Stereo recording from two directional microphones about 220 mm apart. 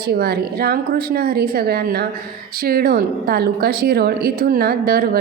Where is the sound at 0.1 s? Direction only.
45° right (ahead or behind).